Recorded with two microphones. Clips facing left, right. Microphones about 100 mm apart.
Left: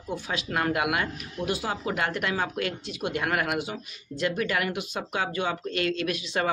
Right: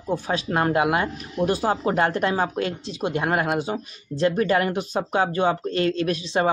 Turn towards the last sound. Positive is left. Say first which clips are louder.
# right 5 dB
turn(degrees=-35)  # may be behind; listen again after turning